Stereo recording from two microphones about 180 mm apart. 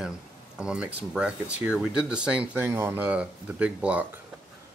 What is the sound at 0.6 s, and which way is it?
Speech, 5° right (ahead or behind).